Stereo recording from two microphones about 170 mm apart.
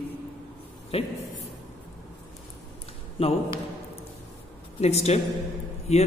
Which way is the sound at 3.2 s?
35° left (ahead or behind).